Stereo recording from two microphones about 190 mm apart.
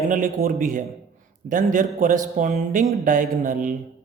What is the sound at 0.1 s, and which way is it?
Speech, 45° right (ahead or behind).